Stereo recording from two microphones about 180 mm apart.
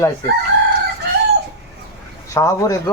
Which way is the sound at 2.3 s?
15° left (ahead or behind).